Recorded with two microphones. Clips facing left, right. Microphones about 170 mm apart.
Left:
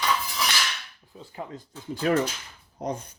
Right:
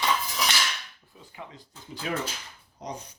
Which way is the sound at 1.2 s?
25° left (ahead or behind).